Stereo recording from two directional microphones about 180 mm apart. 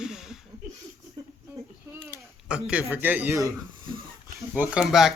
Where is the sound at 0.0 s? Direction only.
5° right (ahead or behind).